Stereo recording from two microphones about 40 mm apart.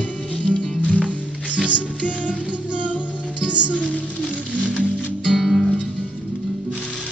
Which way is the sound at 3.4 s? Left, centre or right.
Right.